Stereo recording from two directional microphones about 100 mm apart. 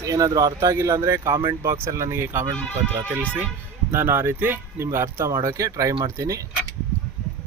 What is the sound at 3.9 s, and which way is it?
Speech, 20° right (ahead or behind).